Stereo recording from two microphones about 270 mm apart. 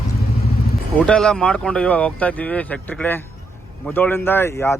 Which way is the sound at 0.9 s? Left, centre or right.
Centre.